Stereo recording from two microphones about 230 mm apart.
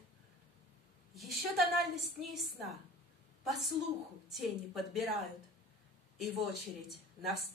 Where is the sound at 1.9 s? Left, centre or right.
Centre.